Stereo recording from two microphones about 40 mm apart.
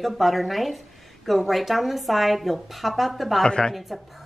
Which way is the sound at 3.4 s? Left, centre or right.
Centre.